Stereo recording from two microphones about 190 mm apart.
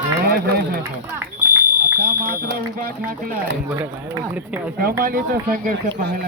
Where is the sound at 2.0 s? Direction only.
50° right (ahead or behind).